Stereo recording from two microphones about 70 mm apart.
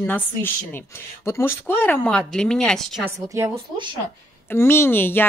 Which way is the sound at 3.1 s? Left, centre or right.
Right.